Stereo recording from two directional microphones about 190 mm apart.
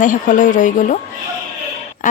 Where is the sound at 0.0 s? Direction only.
45° left (ahead or behind).